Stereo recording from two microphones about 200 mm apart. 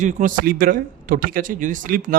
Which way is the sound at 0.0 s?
40° right (ahead or behind).